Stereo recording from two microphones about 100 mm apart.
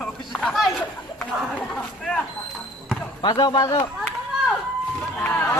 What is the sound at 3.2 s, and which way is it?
Speech, 45° left (ahead or behind).